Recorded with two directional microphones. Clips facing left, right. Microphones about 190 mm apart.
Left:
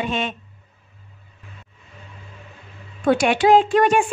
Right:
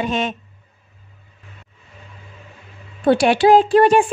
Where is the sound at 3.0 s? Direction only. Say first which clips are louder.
Right 3 dB; 30° right (ahead or behind).